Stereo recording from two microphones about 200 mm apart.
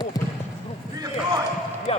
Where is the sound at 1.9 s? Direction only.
30° left (ahead or behind).